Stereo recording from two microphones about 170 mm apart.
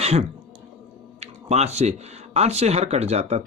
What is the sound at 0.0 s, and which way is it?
Speech, 40° right (ahead or behind).